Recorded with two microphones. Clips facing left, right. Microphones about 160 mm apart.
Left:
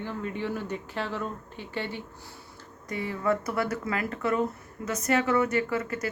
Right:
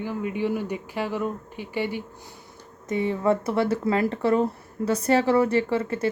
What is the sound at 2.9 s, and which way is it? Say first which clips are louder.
Speech: right 5 dB; 25° right (ahead or behind).